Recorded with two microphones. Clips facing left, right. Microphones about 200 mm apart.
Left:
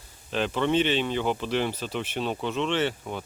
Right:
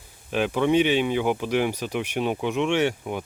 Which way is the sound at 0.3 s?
10° right (ahead or behind).